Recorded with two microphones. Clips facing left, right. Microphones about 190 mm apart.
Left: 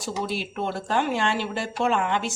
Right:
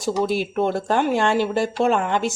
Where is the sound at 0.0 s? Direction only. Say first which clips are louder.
Right 8 dB; 45° right (ahead or behind).